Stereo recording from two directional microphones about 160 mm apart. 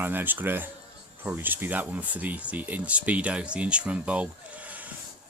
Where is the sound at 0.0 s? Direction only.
10° right (ahead or behind).